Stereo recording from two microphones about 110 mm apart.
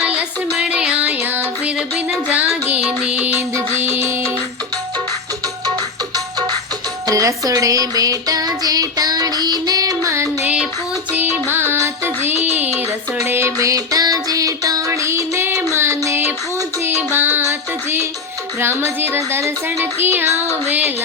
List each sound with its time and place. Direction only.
0.0 s music: 10° right (ahead or behind)
7.1 s child singing: 30° right (ahead or behind)
10.4 s child singing: 10° right (ahead or behind)
11.1 s music: 20° right (ahead or behind)
18.6 s child singing: 20° right (ahead or behind)